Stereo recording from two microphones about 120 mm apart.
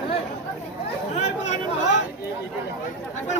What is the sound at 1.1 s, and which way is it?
Chatter, 70° left (ahead or behind).